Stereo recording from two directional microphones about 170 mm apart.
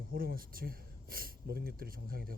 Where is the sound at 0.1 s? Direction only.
60° right (ahead or behind).